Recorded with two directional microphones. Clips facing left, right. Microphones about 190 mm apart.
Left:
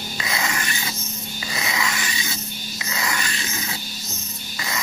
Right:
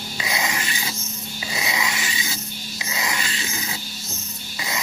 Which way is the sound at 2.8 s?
20° right (ahead or behind).